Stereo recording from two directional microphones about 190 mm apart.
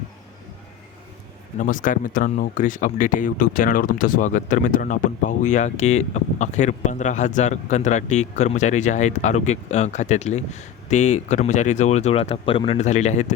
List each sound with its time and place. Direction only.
1.5 s speech: 45° left (ahead or behind)